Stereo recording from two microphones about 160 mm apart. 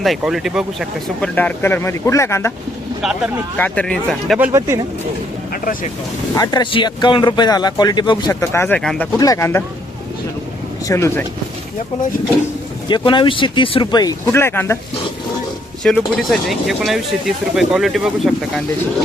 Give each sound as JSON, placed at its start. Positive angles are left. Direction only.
{"t": 0.0, "sound": "speech", "side_deg": 0}
{"t": 1.4, "sound": "speech", "side_deg": 10}
{"t": 3.6, "sound": "speech", "side_deg": 5}
{"t": 4.4, "sound": "speech", "side_deg": -20}
{"t": 6.3, "sound": "speech", "side_deg": 25}
{"t": 8.3, "sound": "speech", "side_deg": 15}
{"t": 9.1, "sound": "speech", "side_deg": 20}
{"t": 10.8, "sound": "speech", "side_deg": 15}
{"t": 12.9, "sound": "speech", "side_deg": 30}
{"t": 15.8, "sound": "speech", "side_deg": 5}